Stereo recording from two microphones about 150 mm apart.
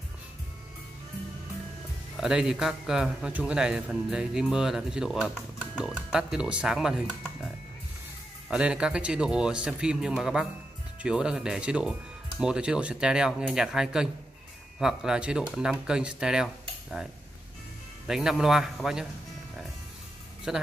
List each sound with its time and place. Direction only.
2.1 s speech: 5° right (ahead or behind)
8.5 s speech: 5° right (ahead or behind)
18.0 s speech: 5° right (ahead or behind)
20.5 s speech: 5° right (ahead or behind)